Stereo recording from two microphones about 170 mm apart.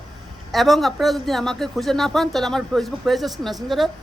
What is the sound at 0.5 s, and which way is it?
Speech, centre (ahead or behind).